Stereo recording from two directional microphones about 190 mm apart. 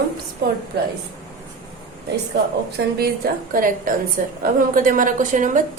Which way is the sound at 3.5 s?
45° right (ahead or behind).